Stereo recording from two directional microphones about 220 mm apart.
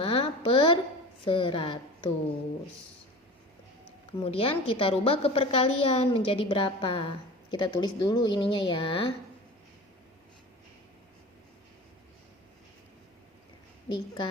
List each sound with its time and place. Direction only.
0.0 s a sound: 25° left (ahead or behind)
1.2 s a woman's voice: 25° left (ahead or behind)
4.2 s a woman's voice: 25° left (ahead or behind)
13.8 s a woman's voice: 20° left (ahead or behind)